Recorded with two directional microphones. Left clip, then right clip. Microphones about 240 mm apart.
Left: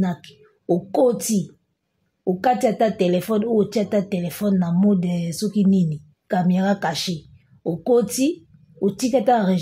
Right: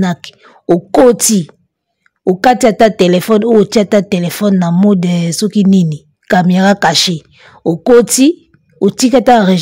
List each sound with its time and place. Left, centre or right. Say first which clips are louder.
0.0 s speech: right 10 dB; right